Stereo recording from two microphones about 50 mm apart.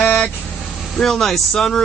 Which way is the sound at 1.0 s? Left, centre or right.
Centre.